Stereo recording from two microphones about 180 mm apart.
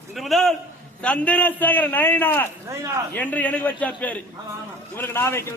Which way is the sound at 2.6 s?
15° right (ahead or behind).